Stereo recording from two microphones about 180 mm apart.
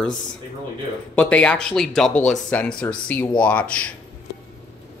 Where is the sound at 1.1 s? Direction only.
5° left (ahead or behind).